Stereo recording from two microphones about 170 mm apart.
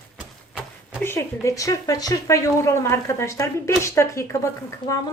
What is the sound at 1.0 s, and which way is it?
Speech, 15° left (ahead or behind).